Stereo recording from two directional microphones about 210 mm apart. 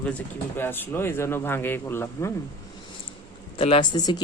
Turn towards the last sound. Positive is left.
turn(degrees=20)  # may be behind; listen again after turning